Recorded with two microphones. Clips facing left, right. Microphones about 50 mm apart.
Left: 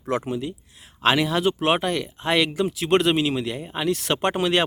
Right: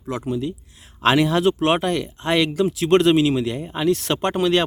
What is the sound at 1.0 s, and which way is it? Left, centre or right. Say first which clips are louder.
Speech: right 3 dB; centre.